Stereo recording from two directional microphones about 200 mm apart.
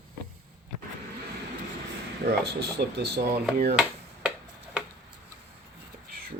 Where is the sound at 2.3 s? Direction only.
55° right (ahead or behind).